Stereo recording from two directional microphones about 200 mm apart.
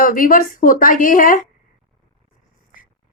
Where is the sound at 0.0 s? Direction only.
45° left (ahead or behind).